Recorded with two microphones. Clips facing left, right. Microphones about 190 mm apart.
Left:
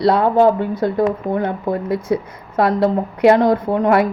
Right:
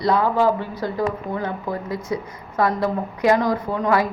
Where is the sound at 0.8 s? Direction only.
55° left (ahead or behind).